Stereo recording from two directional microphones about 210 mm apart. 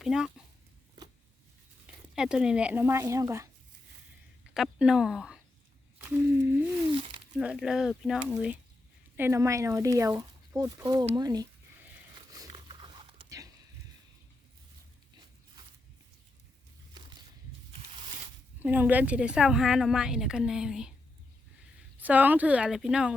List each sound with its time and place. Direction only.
0.0 s speech: 5° right (ahead or behind)
2.1 s speech: 5° right (ahead or behind)
4.5 s a woman's voice: centre (ahead or behind); by 11.4 s 20° right (ahead or behind)
12.3 s pant: 20° right (ahead or behind)
18.6 s a woman's voice: 10° right (ahead or behind)
21.9 s a woman's voice: 5° right (ahead or behind)